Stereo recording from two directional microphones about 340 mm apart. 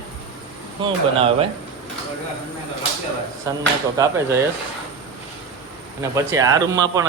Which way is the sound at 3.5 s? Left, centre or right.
Centre.